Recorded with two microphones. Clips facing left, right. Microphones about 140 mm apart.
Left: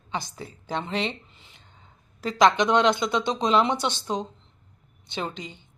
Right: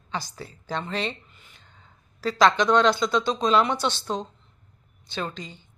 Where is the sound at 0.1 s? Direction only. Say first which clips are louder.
Left 1 dB; 20° left (ahead or behind).